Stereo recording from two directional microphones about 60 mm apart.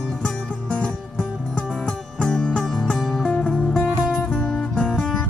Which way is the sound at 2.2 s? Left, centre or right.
Centre.